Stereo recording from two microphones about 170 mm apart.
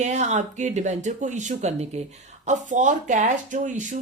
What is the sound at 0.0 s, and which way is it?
Speech, 45° right (ahead or behind).